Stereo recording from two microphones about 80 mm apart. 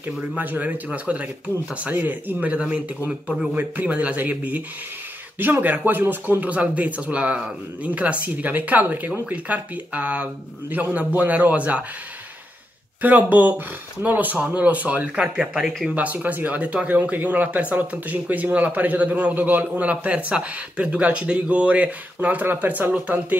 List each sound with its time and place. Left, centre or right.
0.4 s speech: right
13.0 s speech: right